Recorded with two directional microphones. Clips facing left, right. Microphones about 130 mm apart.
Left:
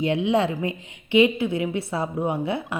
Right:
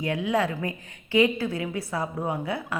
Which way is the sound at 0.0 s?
25° left (ahead or behind).